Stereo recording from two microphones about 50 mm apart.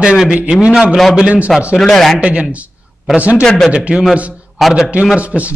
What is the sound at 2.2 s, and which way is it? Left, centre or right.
A man's voice, right.